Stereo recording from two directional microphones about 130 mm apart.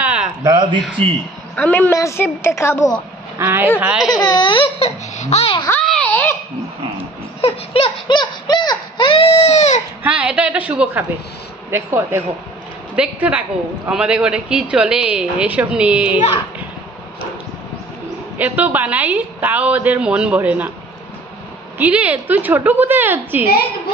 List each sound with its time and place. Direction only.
0.0 s a sound: 10° right (ahead or behind)
0.4 s a man's voice: 25° right (ahead or behind)
1.0 s a man's voice: 50° right (ahead or behind)
1.5 s a woman's voice: 10° left (ahead or behind)
3.3 s speech: 20° right (ahead or behind)
3.8 s speech: 10° right (ahead or behind)
4.2 s speech: 35° left (ahead or behind); by 5.6 s 55° left (ahead or behind)
5.9 s a sound: 10° left (ahead or behind)
7.4 s a sound: 45° left (ahead or behind)
8.2 s baby cry: 30° left (ahead or behind); by 9.8 s 55° left (ahead or behind)
10.0 s speech: 10° right (ahead or behind)
18.4 s speech: 10° right (ahead or behind)
21.7 s speech: 10° right (ahead or behind)